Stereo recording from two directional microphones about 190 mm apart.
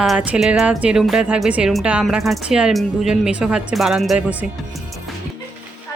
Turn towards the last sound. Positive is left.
turn(degrees=-5)  # may be behind; listen again after turning